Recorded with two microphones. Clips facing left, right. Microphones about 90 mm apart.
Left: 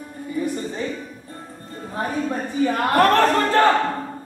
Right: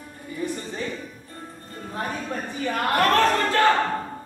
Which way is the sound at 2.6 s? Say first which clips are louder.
Left 5 dB; 35° left (ahead or behind).